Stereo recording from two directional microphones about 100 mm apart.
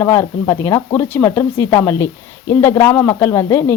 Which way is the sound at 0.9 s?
20° left (ahead or behind).